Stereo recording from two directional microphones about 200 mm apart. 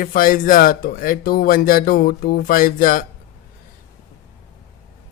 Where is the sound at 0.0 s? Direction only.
45° left (ahead or behind).